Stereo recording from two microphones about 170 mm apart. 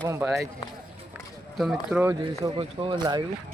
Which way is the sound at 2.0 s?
20° right (ahead or behind).